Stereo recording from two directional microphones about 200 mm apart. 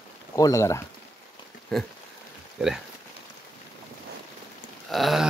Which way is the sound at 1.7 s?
Centre (ahead or behind).